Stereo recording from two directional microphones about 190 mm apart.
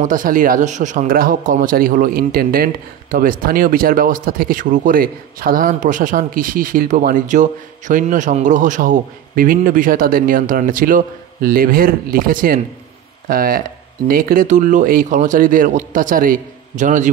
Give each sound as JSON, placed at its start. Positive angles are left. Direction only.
{"t": 0.0, "sound": "speech", "side_deg": -45}